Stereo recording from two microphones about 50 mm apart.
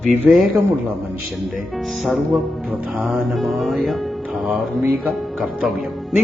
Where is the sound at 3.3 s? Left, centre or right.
Centre.